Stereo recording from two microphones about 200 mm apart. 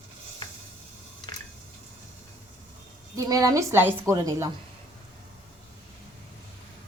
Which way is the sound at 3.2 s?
15° right (ahead or behind).